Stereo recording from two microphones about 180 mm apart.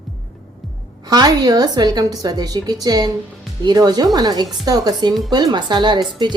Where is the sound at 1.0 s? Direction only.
20° right (ahead or behind).